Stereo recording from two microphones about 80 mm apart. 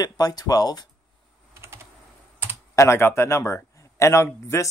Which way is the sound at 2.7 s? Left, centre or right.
Left.